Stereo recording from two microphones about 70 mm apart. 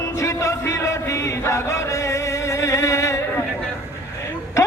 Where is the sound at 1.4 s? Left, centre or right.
Left.